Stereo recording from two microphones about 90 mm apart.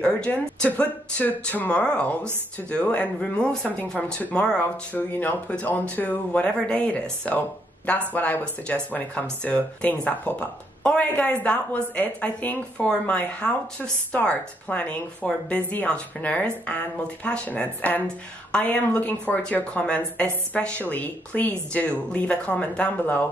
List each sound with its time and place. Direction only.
0.0 s speech: 10° left (ahead or behind)